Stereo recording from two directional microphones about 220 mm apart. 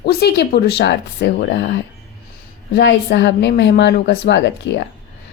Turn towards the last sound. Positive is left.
turn(degrees=50)  # may be behind; listen again after turning